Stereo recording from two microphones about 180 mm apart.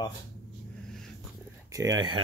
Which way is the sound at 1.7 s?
20° right (ahead or behind).